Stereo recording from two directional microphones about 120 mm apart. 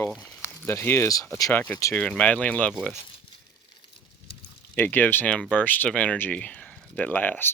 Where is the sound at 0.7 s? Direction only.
20° left (ahead or behind).